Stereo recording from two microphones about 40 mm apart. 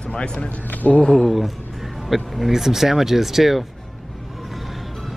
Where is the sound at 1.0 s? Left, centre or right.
Centre.